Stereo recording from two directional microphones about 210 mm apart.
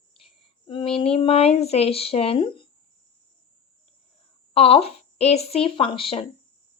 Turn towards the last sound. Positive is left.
turn(degrees=25)  # may be behind; listen again after turning